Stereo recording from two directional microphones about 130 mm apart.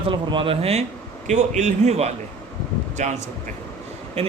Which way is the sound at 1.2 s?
65° right (ahead or behind).